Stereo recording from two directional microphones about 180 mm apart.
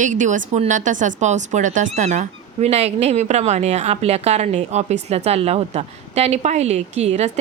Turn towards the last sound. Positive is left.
turn(degrees=-35)  # may be behind; listen again after turning